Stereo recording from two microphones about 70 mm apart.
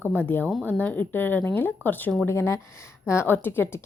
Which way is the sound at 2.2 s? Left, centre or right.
Left.